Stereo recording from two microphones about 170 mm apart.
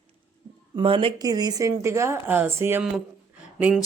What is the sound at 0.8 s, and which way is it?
Speech, 30° right (ahead or behind).